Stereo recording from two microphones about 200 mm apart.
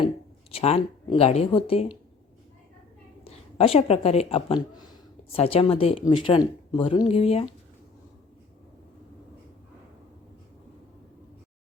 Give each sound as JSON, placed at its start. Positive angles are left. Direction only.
{"t": 0.5, "sound": "a woman's voice", "side_deg": 30}
{"t": 3.2, "sound": "speech", "side_deg": 30}